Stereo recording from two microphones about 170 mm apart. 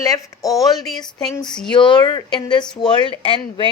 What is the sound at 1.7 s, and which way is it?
Speech, 25° left (ahead or behind).